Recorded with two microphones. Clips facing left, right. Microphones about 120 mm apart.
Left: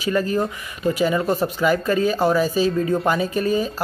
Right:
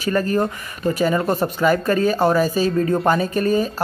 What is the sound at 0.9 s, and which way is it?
Speech, 45° right (ahead or behind).